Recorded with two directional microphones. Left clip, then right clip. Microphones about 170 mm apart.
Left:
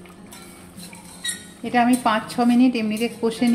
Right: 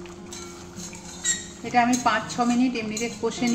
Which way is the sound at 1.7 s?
60° left (ahead or behind).